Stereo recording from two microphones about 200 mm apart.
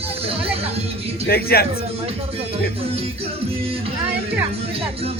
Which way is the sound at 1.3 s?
50° left (ahead or behind).